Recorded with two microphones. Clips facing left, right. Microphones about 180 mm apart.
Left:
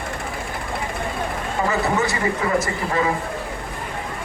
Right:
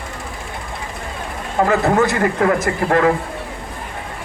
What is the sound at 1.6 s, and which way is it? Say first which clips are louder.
Speech: right 6 dB; 60° right (ahead or behind).